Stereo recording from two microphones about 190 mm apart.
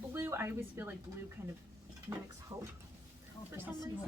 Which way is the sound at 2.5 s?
20° right (ahead or behind).